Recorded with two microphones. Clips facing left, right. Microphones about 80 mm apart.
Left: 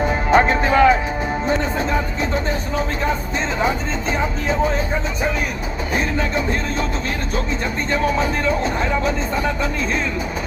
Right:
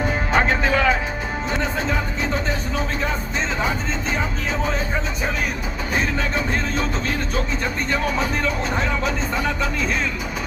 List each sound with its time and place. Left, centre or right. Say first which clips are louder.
0.3 s speech: left 5 dB; left
5.9 s music: left 2 dB; left
8.2 s music: left 3 dB; left